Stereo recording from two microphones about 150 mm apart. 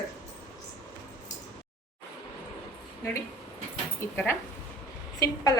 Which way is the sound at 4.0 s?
15° left (ahead or behind).